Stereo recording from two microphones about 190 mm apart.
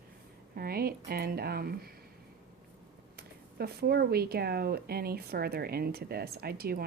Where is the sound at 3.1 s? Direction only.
55° right (ahead or behind).